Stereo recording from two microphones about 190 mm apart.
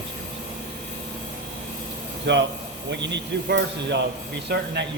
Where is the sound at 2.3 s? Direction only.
70° right (ahead or behind).